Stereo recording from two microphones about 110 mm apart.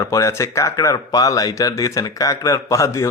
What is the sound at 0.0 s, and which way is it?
Speech, 30° left (ahead or behind).